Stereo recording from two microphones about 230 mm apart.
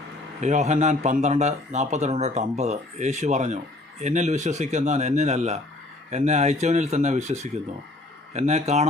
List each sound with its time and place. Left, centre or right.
0.4 s speech: right